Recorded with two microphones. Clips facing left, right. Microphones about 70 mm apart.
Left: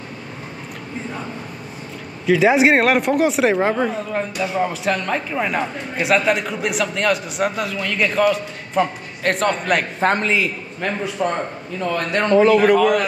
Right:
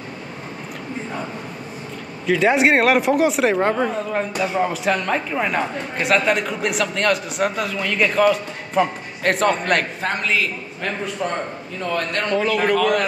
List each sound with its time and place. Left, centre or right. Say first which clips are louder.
2.2 s speech: left 2 dB; centre
9.9 s a man's voice: left 5 dB; left
10.3 s speech: left 1 dB; centre